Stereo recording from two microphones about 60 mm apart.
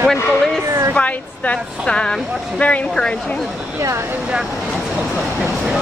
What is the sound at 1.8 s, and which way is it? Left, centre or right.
Speech, centre.